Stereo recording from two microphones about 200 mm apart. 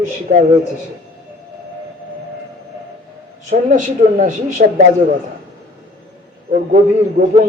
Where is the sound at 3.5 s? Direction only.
40° right (ahead or behind).